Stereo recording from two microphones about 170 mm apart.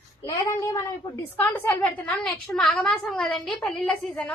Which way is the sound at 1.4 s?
10° left (ahead or behind).